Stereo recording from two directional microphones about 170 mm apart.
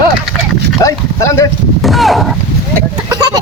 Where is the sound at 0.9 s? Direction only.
15° left (ahead or behind).